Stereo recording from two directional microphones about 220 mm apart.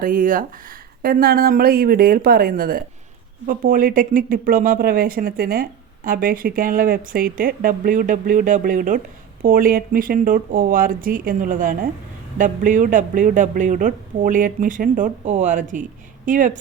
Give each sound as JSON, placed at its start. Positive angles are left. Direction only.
{"t": 0.0, "sound": "speech", "side_deg": -40}